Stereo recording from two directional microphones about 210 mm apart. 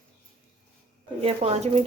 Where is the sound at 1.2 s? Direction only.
30° right (ahead or behind).